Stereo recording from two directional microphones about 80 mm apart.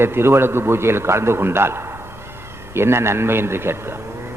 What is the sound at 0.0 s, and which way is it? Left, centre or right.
A man's voice, right.